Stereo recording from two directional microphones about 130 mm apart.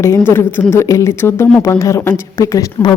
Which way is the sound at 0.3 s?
15° left (ahead or behind).